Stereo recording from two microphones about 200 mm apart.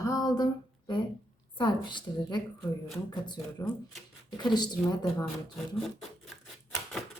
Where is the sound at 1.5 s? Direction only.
20° left (ahead or behind).